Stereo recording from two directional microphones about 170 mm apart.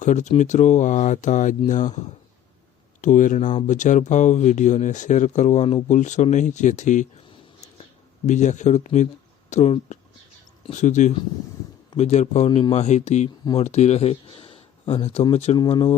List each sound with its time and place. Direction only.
0.0 s speech: 45° left (ahead or behind)
3.0 s speech: 50° left (ahead or behind)
8.3 s speech: 45° left (ahead or behind)
12.5 s speech: 25° left (ahead or behind)
12.7 s speech: 40° left (ahead or behind)
15.5 s speech: 25° left (ahead or behind)